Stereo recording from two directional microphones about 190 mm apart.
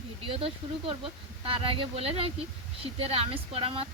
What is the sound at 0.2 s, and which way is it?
Speech, 30° right (ahead or behind).